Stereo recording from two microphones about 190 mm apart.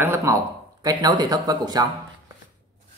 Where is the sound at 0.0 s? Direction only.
15° right (ahead or behind).